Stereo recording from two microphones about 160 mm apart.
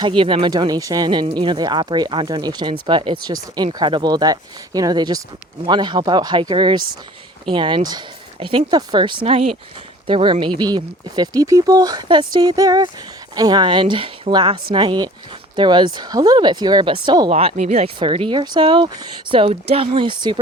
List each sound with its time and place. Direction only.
0.2 s speech: 30° right (ahead or behind)
17.3 s speech: 40° right (ahead or behind)